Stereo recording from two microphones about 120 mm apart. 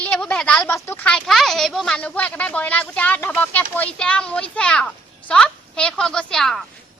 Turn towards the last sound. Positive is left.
turn(degrees=0)  # may be behind; listen again after turning